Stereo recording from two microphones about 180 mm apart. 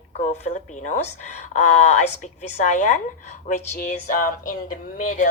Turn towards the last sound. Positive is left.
turn(degrees=50)  # may be behind; listen again after turning